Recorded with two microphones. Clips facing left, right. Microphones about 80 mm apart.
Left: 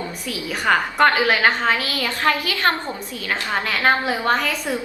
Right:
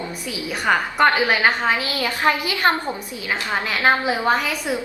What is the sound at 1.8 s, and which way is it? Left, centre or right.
A woman's voice, right.